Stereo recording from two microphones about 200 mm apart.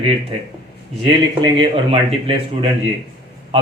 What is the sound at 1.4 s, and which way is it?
Speech, 25° right (ahead or behind).